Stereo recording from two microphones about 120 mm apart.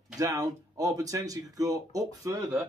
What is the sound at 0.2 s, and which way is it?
Speech, 30° right (ahead or behind).